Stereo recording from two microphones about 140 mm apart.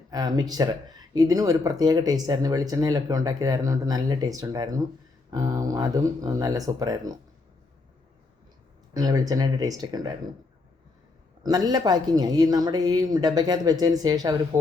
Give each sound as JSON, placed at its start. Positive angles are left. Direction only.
{"t": 0.1, "sound": "speech", "side_deg": -30}
{"t": 8.9, "sound": "speech", "side_deg": -25}
{"t": 11.4, "sound": "speech", "side_deg": -25}